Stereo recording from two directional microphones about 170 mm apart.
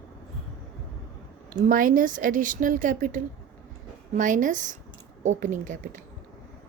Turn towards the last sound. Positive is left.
turn(degrees=-50)  # may be behind; listen again after turning